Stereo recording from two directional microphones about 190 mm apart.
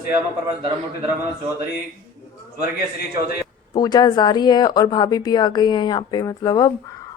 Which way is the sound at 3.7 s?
20° left (ahead or behind).